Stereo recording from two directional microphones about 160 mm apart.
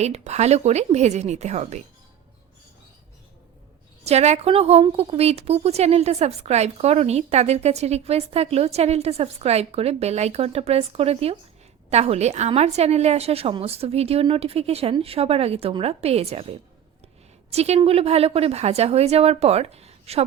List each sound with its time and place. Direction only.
0.0 s speech: 45° right (ahead or behind)
4.0 s a woman's voice: 45° right (ahead or behind)